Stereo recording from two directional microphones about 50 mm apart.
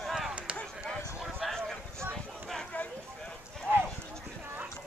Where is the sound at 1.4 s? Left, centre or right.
Centre.